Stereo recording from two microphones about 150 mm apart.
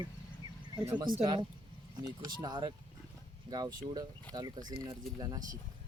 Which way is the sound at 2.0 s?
25° right (ahead or behind).